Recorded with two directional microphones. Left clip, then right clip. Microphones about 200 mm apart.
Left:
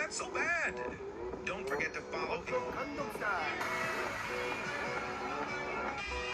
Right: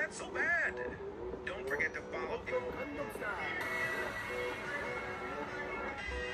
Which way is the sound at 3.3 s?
5° left (ahead or behind).